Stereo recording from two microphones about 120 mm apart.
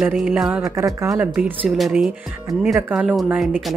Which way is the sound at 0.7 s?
25° right (ahead or behind).